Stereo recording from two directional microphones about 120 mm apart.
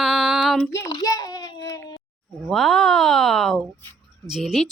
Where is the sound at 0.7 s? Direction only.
25° left (ahead or behind).